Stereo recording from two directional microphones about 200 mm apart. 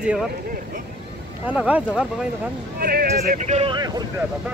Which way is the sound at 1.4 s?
5° right (ahead or behind).